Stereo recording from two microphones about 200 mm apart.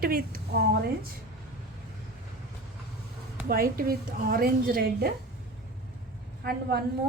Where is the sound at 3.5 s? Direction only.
45° right (ahead or behind).